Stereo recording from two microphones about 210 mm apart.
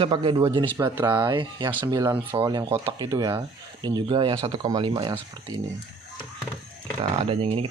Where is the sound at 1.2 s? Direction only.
20° right (ahead or behind).